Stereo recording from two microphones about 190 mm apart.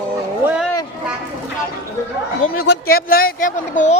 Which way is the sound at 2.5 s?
50° left (ahead or behind).